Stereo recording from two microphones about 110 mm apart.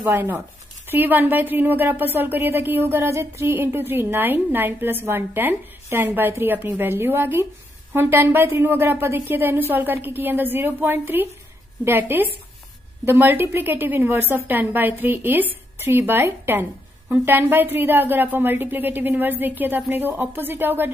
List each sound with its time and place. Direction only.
0.0 s a woman's voice: 20° right (ahead or behind)